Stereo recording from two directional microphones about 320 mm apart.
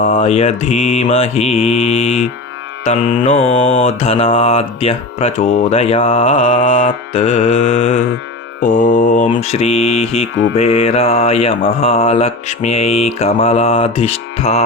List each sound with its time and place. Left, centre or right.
0.0 s speech: left